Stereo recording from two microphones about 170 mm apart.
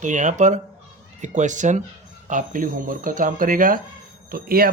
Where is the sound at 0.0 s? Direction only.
45° right (ahead or behind).